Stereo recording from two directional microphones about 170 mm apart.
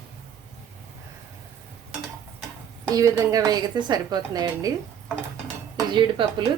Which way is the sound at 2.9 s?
20° right (ahead or behind).